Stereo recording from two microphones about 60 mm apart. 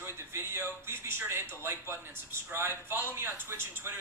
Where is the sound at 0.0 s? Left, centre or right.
Right.